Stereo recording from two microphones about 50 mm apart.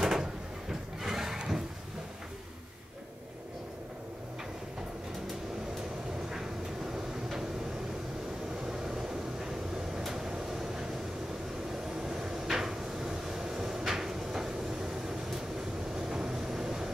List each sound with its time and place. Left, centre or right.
0.0 s a sound: centre
6.3 s vehicle: centre
8.6 s vehicle: centre
11.7 s cupboard open or close: centre
16.0 s vehicle: centre